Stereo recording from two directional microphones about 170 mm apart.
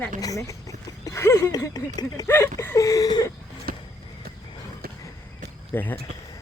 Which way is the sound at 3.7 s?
60° right (ahead or behind).